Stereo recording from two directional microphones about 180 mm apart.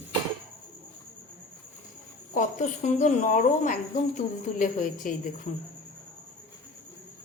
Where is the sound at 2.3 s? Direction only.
45° left (ahead or behind).